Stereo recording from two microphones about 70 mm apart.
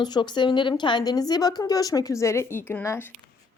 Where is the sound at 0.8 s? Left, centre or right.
Left.